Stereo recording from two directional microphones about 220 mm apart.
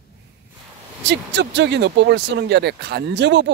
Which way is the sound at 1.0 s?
50° right (ahead or behind).